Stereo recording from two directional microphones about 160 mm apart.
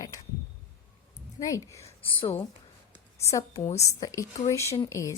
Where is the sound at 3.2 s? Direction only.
20° left (ahead or behind).